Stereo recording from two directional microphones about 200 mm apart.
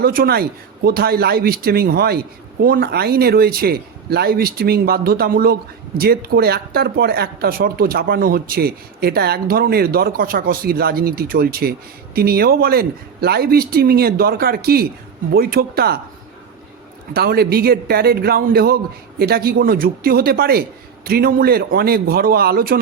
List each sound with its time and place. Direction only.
0.0 s speech: 50° right (ahead or behind)
17.2 s speech: 50° right (ahead or behind)